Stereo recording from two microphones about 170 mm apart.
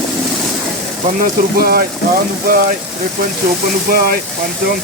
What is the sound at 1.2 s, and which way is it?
Speech, 60° right (ahead or behind).